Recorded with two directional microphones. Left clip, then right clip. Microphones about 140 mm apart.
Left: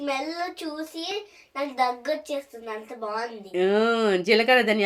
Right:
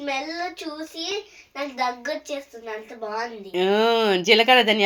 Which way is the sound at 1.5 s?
10° left (ahead or behind).